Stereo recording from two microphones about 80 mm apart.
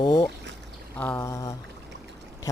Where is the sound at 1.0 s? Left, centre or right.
Left.